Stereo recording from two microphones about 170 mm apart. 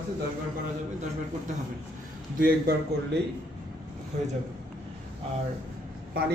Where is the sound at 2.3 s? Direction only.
60° right (ahead or behind).